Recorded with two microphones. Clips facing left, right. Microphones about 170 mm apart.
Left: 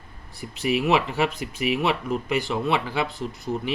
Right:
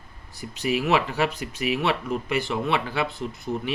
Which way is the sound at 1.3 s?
40° right (ahead or behind).